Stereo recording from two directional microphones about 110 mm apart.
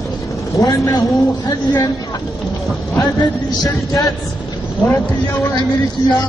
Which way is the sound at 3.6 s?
30° left (ahead or behind).